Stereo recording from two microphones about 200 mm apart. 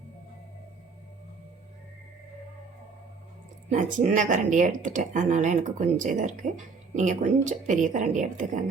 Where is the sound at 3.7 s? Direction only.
40° right (ahead or behind).